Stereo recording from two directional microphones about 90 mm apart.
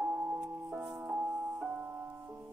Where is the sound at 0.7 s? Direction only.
5° right (ahead or behind).